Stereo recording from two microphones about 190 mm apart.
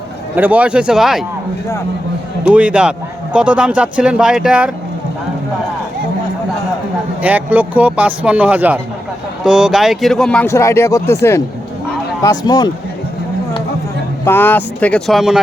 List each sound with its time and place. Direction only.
0.3 s speech: 10° right (ahead or behind)
2.5 s a man's voice: 5° right (ahead or behind)
7.2 s a man's voice: 10° right (ahead or behind); by 12.7 s 20° left (ahead or behind)
14.3 s speech: 10° left (ahead or behind)